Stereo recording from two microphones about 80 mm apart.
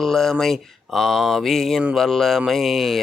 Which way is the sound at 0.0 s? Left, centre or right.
Centre.